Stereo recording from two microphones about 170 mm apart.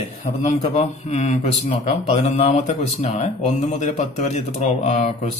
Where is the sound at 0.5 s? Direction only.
40° left (ahead or behind).